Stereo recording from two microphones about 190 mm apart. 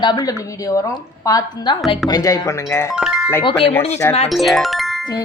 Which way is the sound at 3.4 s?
30° left (ahead or behind).